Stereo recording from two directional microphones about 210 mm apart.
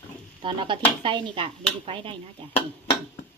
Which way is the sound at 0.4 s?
25° right (ahead or behind).